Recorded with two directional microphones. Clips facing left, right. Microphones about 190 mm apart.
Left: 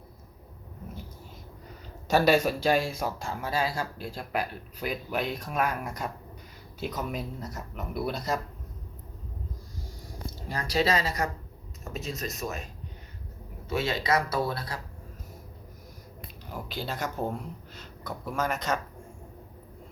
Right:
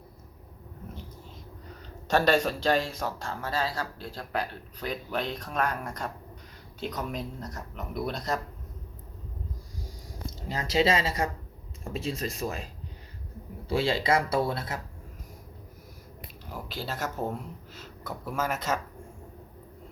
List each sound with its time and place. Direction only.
2.0 s speech: 10° left (ahead or behind)
10.5 s speech: 25° right (ahead or behind)
13.7 s speech: 30° right (ahead or behind)
16.5 s speech: centre (ahead or behind)